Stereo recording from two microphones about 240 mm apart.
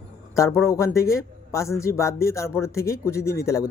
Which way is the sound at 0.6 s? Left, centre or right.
Centre.